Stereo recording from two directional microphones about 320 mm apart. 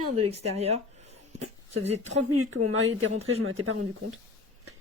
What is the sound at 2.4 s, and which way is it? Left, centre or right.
Speech, right.